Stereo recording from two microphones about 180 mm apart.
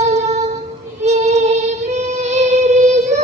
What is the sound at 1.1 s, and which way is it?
Singing, 40° right (ahead or behind).